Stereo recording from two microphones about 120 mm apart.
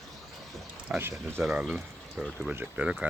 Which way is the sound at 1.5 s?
15° right (ahead or behind).